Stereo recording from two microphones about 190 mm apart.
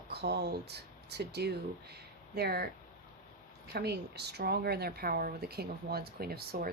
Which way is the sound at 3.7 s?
60° right (ahead or behind).